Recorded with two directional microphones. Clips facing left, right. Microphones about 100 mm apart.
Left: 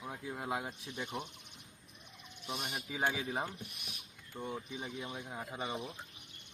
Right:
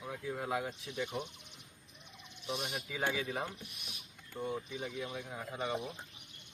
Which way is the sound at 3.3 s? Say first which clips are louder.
Left 1 dB; 55° left (ahead or behind).